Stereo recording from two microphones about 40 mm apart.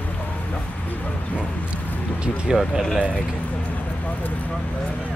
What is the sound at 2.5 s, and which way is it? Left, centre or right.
Speech, centre.